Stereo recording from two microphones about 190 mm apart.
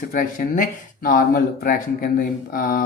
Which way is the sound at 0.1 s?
45° left (ahead or behind).